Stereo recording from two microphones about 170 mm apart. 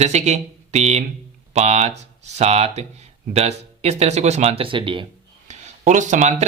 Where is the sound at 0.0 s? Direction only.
40° right (ahead or behind).